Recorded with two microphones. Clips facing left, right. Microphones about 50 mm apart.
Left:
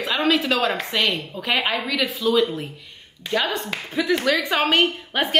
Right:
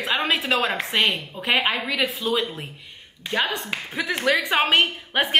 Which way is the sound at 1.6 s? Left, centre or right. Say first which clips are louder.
Even; centre.